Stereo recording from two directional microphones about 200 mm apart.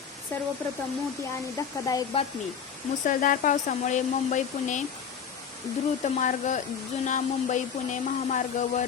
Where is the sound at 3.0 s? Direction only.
40° left (ahead or behind).